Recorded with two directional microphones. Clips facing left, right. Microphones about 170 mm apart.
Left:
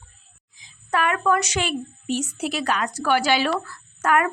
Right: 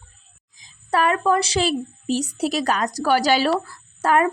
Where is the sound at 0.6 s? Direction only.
35° right (ahead or behind).